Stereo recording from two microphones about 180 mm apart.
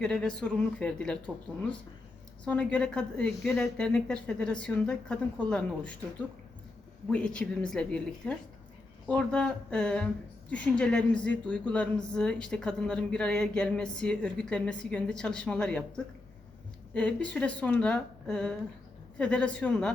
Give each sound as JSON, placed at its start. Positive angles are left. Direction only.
{"t": 0.0, "sound": "speech", "side_deg": 5}
{"t": 2.4, "sound": "speech", "side_deg": 5}
{"t": 7.1, "sound": "speech", "side_deg": 5}
{"t": 16.9, "sound": "speech", "side_deg": 5}